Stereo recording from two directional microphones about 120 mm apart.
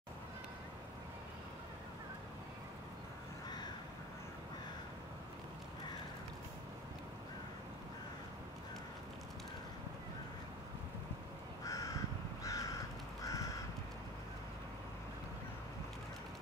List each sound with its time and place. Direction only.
11.6 s crow: 30° left (ahead or behind)